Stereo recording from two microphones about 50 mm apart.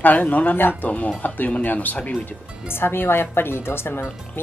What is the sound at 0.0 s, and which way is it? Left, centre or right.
Speech, left.